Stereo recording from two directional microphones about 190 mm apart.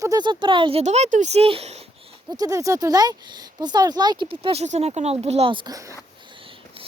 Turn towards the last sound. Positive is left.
turn(degrees=-20)  # may be behind; listen again after turning